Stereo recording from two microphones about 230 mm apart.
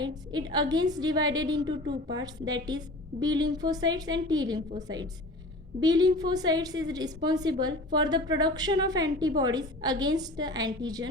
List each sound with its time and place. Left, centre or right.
0.0 s a woman's voice: centre